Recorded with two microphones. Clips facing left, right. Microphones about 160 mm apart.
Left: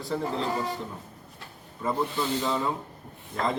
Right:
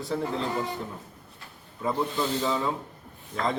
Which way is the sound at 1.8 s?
Centre (ahead or behind).